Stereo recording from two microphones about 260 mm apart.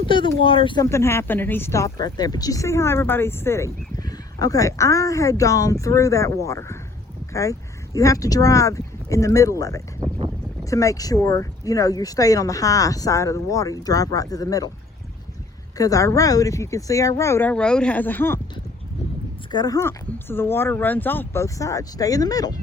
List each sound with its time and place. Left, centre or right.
0.0 s speech: centre
7.9 s speech: centre
10.0 s boat: centre
10.6 s speech: centre
15.8 s speech: centre
19.5 s speech: centre